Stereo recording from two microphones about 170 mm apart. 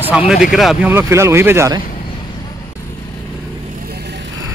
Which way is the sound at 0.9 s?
15° right (ahead or behind).